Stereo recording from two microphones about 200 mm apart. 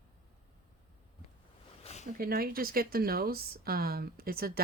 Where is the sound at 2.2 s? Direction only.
50° right (ahead or behind).